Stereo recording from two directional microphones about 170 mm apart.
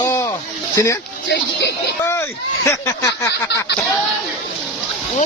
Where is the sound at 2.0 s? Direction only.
15° left (ahead or behind).